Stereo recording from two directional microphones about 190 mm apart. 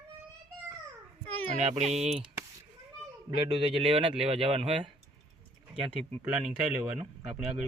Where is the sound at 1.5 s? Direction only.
35° right (ahead or behind).